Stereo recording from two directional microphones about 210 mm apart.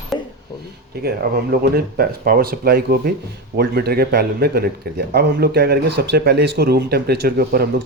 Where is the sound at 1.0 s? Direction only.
50° right (ahead or behind).